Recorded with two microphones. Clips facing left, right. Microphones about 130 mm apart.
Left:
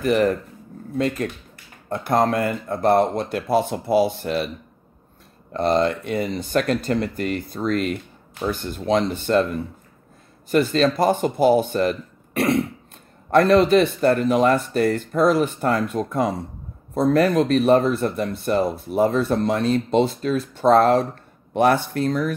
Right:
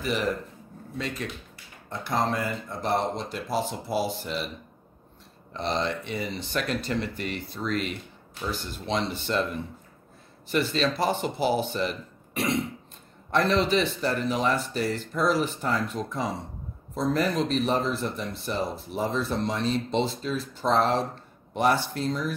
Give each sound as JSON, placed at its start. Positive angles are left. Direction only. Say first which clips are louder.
{"t": 0.0, "sound": "speech", "louder": "left 9 dB", "side_deg": 50}
{"t": 5.5, "sound": "speech", "louder": "left 9 dB", "side_deg": 50}
{"t": 10.5, "sound": "speech", "louder": "left 7 dB", "side_deg": 45}